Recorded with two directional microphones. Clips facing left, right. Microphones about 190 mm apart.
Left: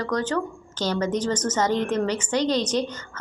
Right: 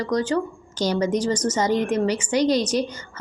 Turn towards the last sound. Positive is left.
turn(degrees=-10)  # may be behind; listen again after turning